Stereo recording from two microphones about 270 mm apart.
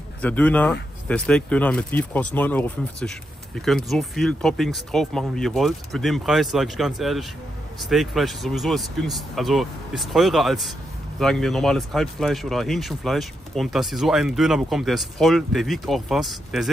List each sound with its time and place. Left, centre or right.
0.2 s speech: centre